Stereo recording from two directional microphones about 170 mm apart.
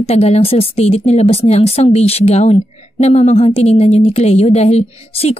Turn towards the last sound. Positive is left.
turn(degrees=35)  # may be behind; listen again after turning